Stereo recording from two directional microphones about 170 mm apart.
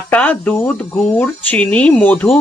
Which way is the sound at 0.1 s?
10° left (ahead or behind).